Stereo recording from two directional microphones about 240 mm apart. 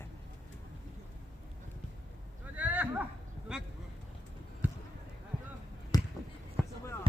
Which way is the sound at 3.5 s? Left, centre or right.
Centre.